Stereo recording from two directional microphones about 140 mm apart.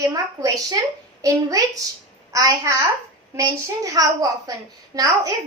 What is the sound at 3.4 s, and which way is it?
A woman's voice, 25° right (ahead or behind).